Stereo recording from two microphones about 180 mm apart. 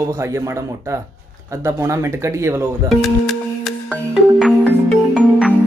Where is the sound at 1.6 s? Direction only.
15° right (ahead or behind).